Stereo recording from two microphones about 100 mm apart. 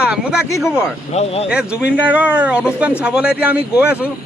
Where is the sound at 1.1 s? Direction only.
90° left.